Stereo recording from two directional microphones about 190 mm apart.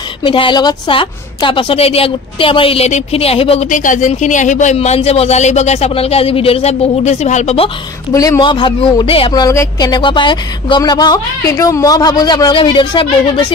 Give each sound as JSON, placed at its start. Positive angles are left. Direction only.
{"t": 0.2, "sound": "a woman's voice", "side_deg": 25}
{"t": 8.1, "sound": "a woman's voice", "side_deg": 20}